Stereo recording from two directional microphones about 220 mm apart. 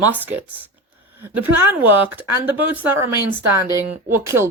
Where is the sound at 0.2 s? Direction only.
10° right (ahead or behind).